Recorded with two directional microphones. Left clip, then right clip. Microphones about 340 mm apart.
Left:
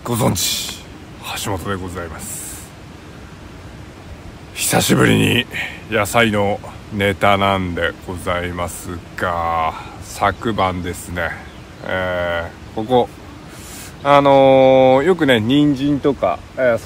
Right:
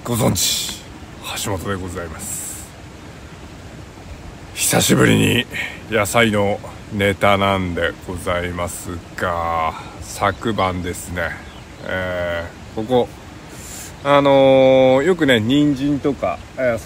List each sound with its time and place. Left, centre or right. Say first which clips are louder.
0.0 s speech: even; centre
4.6 s speech: even; centre